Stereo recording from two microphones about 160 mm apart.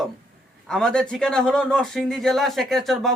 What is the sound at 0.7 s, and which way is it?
Speech, 5° left (ahead or behind).